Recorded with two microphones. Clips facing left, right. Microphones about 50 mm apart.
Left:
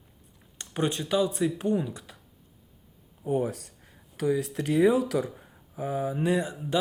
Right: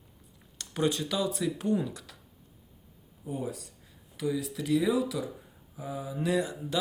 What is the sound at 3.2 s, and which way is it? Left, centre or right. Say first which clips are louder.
Speech: left 8 dB; left.